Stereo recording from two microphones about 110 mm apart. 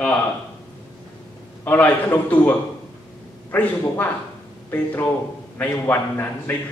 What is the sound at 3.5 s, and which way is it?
A man's voice, 15° left (ahead or behind).